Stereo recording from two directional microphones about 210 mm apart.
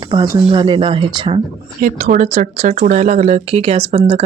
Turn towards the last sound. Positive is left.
turn(degrees=-30)  # may be behind; listen again after turning